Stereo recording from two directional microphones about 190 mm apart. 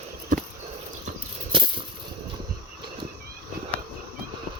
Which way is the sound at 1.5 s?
25° right (ahead or behind).